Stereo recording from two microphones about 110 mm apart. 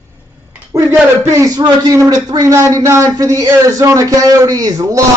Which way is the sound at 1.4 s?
35° right (ahead or behind).